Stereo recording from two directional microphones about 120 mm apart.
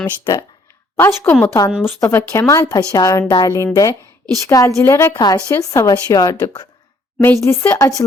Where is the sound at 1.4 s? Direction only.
30° left (ahead or behind).